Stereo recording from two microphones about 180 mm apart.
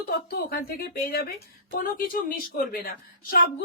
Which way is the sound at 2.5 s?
55° left (ahead or behind).